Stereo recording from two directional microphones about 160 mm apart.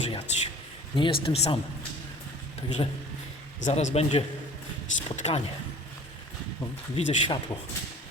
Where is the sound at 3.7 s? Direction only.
40° left (ahead or behind).